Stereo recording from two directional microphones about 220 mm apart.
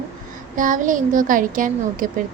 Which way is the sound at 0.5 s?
35° right (ahead or behind).